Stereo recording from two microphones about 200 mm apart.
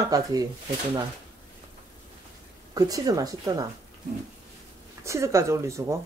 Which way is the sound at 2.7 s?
15° right (ahead or behind).